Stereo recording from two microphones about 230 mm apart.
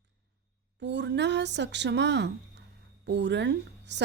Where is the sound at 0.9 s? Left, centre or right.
Right.